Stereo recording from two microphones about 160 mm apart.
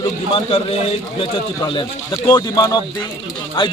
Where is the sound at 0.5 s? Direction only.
40° left (ahead or behind).